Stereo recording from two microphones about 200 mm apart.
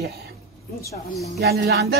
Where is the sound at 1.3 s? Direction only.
55° right (ahead or behind).